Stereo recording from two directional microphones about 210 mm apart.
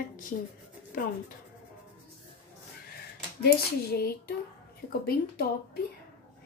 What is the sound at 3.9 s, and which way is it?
A woman's voice, 45° left (ahead or behind).